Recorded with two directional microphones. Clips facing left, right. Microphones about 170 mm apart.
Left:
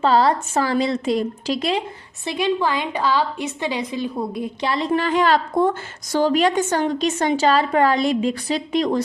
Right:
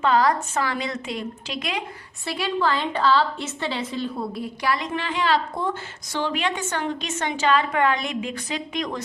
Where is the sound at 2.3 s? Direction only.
20° left (ahead or behind).